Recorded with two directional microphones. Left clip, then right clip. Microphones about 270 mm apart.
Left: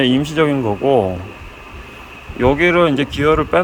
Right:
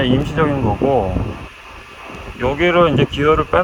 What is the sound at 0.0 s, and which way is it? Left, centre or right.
Speech, left.